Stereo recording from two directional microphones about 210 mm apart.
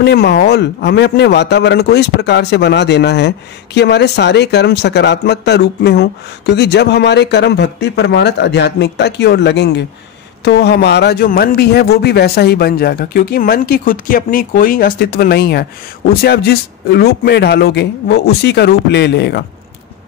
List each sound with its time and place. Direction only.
0.0 s a man's voice: 50° left (ahead or behind)